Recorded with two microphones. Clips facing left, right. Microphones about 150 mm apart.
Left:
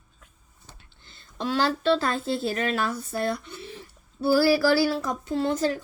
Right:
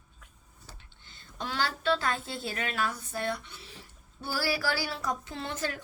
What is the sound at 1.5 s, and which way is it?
Speech, 35° left (ahead or behind).